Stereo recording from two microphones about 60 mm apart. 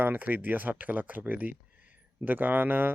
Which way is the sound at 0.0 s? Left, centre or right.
Right.